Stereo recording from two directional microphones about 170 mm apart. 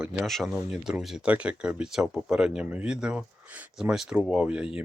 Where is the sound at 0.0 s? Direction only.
5° right (ahead or behind).